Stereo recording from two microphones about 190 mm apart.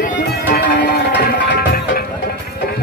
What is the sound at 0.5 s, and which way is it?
Music, 60° left (ahead or behind).